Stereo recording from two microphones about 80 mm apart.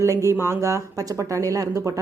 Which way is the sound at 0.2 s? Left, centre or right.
Right.